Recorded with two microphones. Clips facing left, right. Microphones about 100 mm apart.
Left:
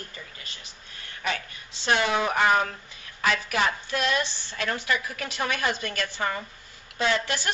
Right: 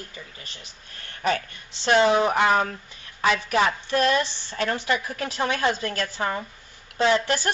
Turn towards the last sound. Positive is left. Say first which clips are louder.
# right 5 dB
turn(degrees=-30)  # may be behind; listen again after turning